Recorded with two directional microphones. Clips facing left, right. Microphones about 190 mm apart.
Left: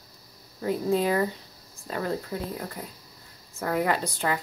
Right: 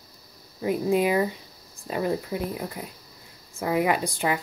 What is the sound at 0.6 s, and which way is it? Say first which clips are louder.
Speech: right 2 dB; 15° right (ahead or behind).